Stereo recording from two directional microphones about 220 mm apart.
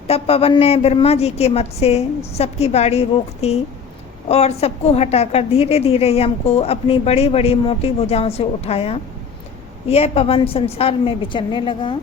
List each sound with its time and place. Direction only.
0.1 s a woman's voice: 25° left (ahead or behind)